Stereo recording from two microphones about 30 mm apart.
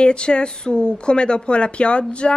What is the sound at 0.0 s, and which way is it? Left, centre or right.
A woman's voice, left.